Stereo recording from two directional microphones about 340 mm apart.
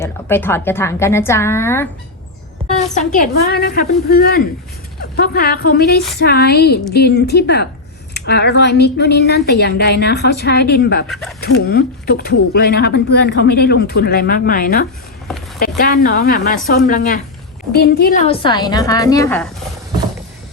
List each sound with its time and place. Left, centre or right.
0.0 s a woman's voice: centre
2.7 s a woman's voice: left
11.1 s speech: centre
11.4 s a woman's voice: left
15.3 s a sound: centre
15.8 s a woman's voice: left; by 19.5 s centre